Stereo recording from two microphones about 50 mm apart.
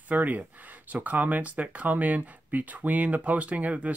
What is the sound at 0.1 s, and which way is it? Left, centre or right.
Speech, right.